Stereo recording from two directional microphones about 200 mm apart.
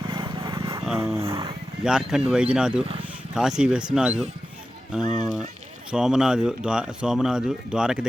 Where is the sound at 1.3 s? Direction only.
25° right (ahead or behind).